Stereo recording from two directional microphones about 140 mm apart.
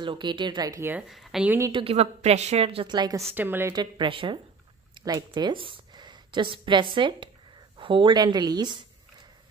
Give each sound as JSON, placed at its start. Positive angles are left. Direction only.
{"t": 0.0, "sound": "a woman's voice", "side_deg": -35}
{"t": 1.0, "sound": "speech", "side_deg": 0}
{"t": 1.7, "sound": "a woman's voice", "side_deg": -40}
{"t": 3.3, "sound": "a woman's voice", "side_deg": -15}
{"t": 3.7, "sound": "a woman's voice", "side_deg": -35}